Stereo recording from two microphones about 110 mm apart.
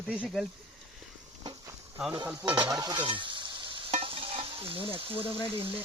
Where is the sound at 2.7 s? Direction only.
35° right (ahead or behind); by 4.8 s 55° right (ahead or behind).